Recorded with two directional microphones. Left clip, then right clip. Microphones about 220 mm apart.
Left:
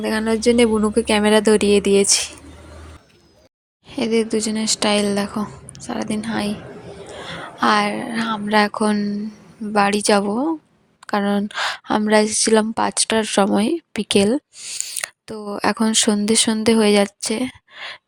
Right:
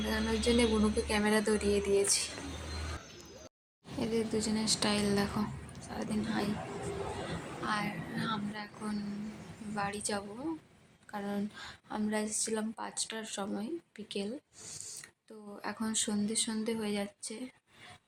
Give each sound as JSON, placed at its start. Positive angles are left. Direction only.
{"t": 0.0, "sound": "a woman's voice", "side_deg": 40}
{"t": 3.8, "sound": "a woman's voice", "side_deg": 40}
{"t": 7.6, "sound": "a woman's voice", "side_deg": 40}